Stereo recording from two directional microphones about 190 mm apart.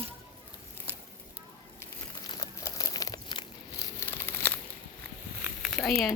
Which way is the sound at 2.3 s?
20° left (ahead or behind).